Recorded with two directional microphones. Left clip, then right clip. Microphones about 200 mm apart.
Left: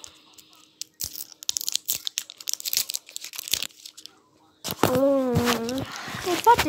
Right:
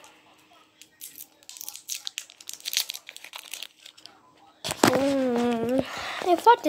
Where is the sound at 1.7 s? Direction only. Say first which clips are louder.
Left 7 dB; 40° left (ahead or behind).